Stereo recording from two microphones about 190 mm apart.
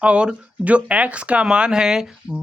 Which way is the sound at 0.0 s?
5° right (ahead or behind).